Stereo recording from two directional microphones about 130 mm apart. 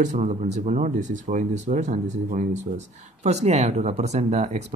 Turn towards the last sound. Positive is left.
turn(degrees=-60)  # may be behind; listen again after turning